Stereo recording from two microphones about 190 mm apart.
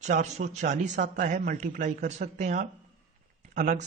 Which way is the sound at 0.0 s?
40° right (ahead or behind).